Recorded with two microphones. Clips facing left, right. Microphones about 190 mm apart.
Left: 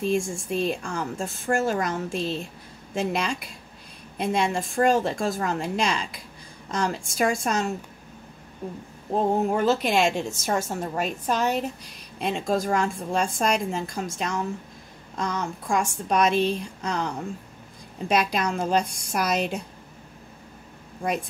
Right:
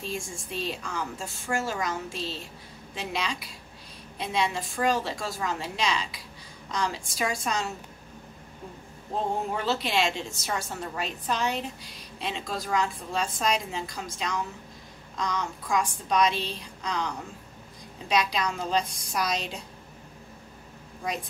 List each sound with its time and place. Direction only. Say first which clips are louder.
0.0 s a woman's voice: left 10 dB; 50° left (ahead or behind)
9.1 s a woman's voice: left 7 dB; 50° left (ahead or behind)
18.0 s a woman's voice: left 3 dB; 55° left (ahead or behind)